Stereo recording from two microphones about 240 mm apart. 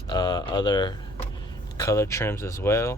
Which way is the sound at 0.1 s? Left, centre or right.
Centre.